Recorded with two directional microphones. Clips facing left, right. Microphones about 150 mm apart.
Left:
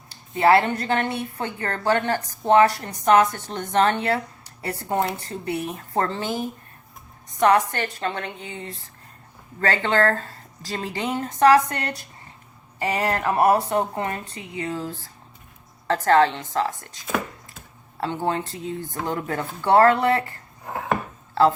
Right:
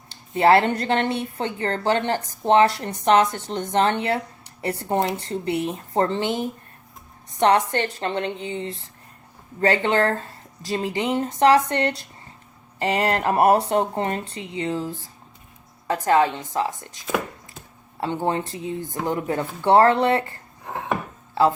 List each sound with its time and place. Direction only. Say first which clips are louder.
0.3 s speech: right 1 dB; 30° right (ahead or behind)
5.2 s a woman's voice: right 3 dB; 25° right (ahead or behind)
18.0 s speech: right 1 dB; 15° right (ahead or behind)